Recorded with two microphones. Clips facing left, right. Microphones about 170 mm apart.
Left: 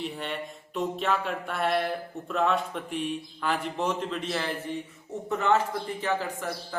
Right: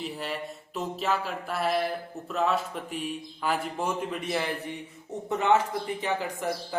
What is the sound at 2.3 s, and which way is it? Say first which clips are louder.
A man's voice: left 1 dB; centre (ahead or behind).